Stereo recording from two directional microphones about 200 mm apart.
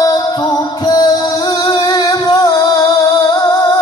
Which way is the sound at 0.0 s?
20° left (ahead or behind).